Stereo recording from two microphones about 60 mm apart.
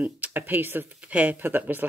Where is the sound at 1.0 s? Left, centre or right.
Right.